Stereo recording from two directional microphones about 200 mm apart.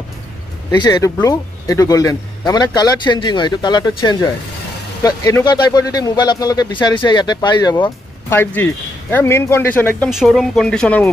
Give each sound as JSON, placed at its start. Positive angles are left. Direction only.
{"t": 0.7, "sound": "speech", "side_deg": 15}
{"t": 10.0, "sound": "speech", "side_deg": 0}